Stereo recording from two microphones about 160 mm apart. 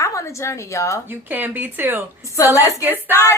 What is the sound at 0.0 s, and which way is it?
A woman's voice, 20° left (ahead or behind).